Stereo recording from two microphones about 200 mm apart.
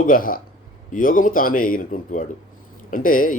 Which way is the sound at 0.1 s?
45° left (ahead or behind).